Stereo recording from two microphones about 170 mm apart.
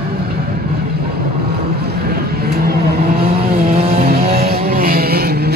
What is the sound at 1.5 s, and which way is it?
Vehicle, 70° right (ahead or behind).